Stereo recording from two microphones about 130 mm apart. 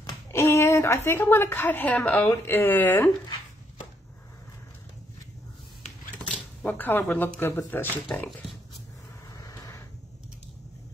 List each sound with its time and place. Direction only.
0.0 s a woman's voice: 20° left (ahead or behind)
6.3 s speech: 15° left (ahead or behind)
9.4 s a sound: 25° left (ahead or behind)